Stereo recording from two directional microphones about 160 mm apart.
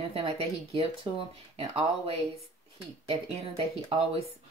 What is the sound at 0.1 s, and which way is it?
Speech, 40° right (ahead or behind).